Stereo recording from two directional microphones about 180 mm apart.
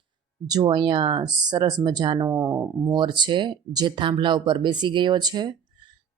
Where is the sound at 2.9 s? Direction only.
25° right (ahead or behind).